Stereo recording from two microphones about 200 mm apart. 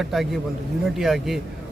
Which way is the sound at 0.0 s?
Centre (ahead or behind).